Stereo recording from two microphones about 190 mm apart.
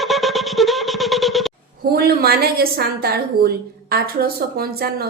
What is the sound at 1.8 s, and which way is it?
A woman's voice, 55° right (ahead or behind).